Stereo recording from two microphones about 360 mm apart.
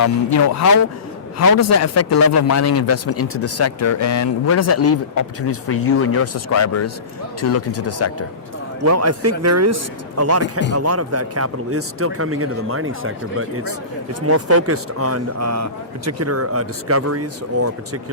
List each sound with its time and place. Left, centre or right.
0.0 s a man's voice: left
8.8 s speech: right